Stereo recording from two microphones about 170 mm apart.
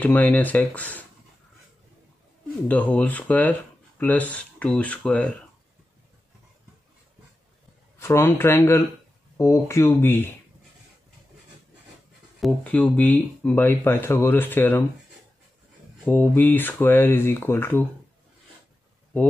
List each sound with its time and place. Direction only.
0.0 s speech: 10° left (ahead or behind)
2.7 s speech: 10° left (ahead or behind)
8.0 s speech: 15° left (ahead or behind)
12.4 s speech: 5° left (ahead or behind)
16.1 s speech: 10° left (ahead or behind)